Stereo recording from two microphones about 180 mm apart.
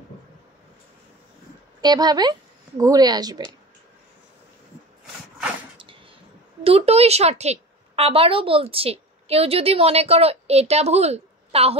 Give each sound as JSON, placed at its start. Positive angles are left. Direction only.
{"t": 1.8, "sound": "speech", "side_deg": -20}
{"t": 6.6, "sound": "a woman's voice", "side_deg": -35}